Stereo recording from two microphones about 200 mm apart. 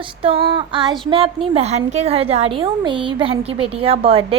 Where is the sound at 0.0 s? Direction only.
25° right (ahead or behind).